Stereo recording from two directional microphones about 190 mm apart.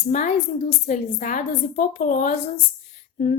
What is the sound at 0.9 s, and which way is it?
A woman's voice, 40° left (ahead or behind).